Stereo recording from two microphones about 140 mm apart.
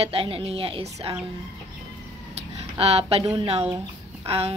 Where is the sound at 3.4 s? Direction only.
45° right (ahead or behind).